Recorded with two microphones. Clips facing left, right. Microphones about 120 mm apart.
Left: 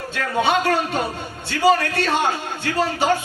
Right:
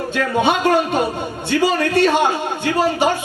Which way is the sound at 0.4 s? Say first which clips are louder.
Right 3 dB; 20° right (ahead or behind).